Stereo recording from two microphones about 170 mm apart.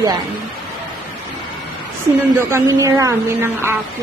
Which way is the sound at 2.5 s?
15° right (ahead or behind).